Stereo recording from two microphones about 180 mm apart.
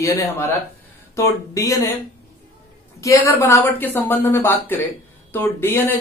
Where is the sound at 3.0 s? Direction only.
15° left (ahead or behind).